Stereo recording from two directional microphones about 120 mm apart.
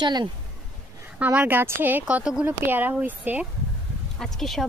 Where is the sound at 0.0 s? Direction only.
40° right (ahead or behind).